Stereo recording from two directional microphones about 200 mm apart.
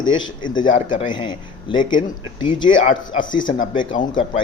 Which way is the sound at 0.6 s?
40° left (ahead or behind).